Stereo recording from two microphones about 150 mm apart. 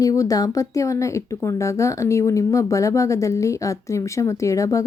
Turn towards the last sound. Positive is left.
turn(degrees=20)  # may be behind; listen again after turning